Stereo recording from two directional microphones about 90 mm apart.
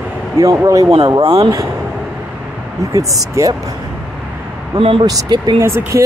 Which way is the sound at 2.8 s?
35° right (ahead or behind).